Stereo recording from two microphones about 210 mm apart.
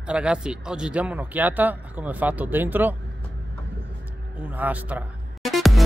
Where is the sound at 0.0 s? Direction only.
5° right (ahead or behind).